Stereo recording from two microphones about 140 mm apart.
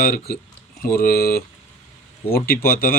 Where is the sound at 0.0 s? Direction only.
90° left.